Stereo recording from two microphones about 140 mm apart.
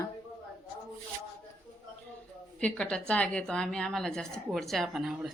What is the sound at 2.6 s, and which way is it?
A woman's voice, 5° left (ahead or behind).